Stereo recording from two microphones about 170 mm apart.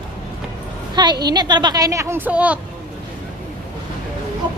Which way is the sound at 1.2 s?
25° right (ahead or behind).